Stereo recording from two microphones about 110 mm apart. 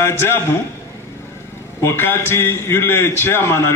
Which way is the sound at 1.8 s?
20° left (ahead or behind).